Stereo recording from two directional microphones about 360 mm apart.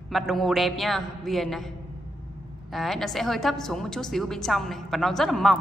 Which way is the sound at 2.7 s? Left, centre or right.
Centre.